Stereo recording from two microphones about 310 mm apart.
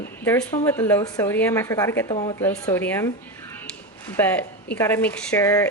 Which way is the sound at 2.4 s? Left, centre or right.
Centre.